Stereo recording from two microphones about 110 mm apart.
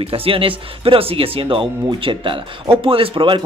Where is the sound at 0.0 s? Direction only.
60° right (ahead or behind).